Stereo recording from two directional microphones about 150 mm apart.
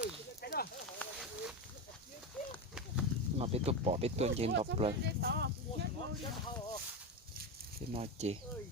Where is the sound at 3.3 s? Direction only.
40° right (ahead or behind).